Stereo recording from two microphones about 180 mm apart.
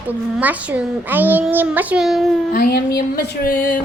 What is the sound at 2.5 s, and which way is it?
Speech, 55° left (ahead or behind).